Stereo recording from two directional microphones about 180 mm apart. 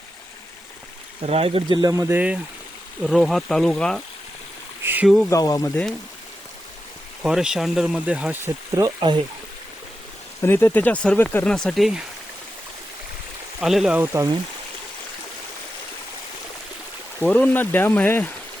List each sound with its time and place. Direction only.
1.2 s speech: 35° right (ahead or behind); by 4.0 s 5° left (ahead or behind)
4.8 s a sound: 10° right (ahead or behind)
5.0 s speech: centre (ahead or behind)
5.3 s speech: 20° left (ahead or behind)
7.2 s speech: 5° right (ahead or behind); by 9.2 s 25° right (ahead or behind)
10.4 s speech: 10° left (ahead or behind)
13.6 s speech: 5° right (ahead or behind)
17.2 s speech: 10° left (ahead or behind)